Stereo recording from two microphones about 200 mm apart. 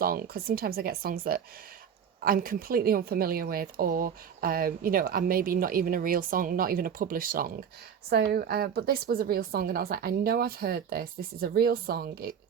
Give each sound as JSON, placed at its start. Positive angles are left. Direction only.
{"t": 0.0, "sound": "a woman's voice", "side_deg": -50}